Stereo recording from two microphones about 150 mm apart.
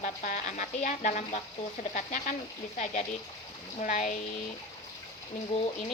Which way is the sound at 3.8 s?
55° left (ahead or behind).